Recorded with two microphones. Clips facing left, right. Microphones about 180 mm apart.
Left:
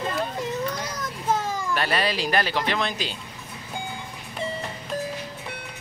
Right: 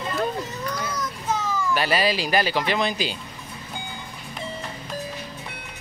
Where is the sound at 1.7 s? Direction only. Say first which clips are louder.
Right 3 dB; 5° right (ahead or behind).